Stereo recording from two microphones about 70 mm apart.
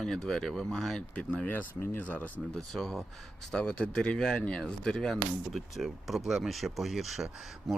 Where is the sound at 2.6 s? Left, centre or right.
Centre.